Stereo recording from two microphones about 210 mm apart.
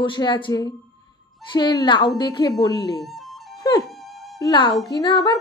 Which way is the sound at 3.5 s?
20° left (ahead or behind).